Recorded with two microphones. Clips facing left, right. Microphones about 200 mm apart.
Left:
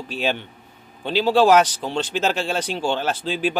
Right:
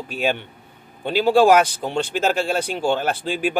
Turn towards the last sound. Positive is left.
turn(degrees=-10)  # may be behind; listen again after turning